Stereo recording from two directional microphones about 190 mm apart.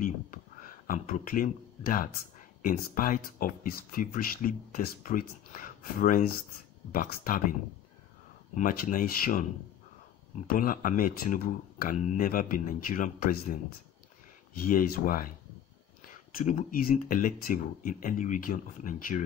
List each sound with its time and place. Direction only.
0.0 s speech: 45° left (ahead or behind)
8.5 s speech: 45° left (ahead or behind)
14.6 s speech: 50° left (ahead or behind)